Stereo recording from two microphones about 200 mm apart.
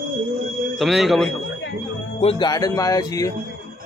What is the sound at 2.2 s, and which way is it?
Speech, 25° left (ahead or behind).